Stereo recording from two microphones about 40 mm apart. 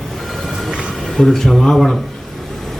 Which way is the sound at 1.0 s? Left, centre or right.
Centre.